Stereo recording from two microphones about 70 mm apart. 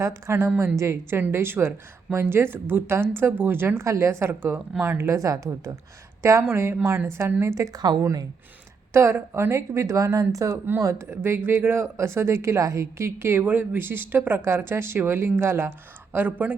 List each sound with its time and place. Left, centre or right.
0.0 s speech: right
3.8 s speech: right
5.0 s speech: right
6.4 s speech: right
7.5 s speech: right
8.9 s speech: right
16.1 s speech: right